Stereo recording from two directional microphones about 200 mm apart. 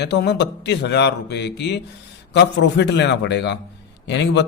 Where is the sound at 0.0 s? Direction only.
55° left (ahead or behind).